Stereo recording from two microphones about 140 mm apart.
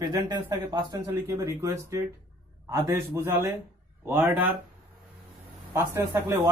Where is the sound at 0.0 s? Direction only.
25° right (ahead or behind).